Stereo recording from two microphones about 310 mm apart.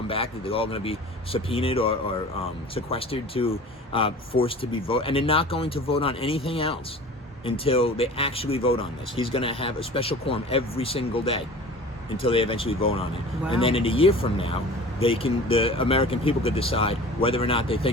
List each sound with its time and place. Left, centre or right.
0.1 s speech: centre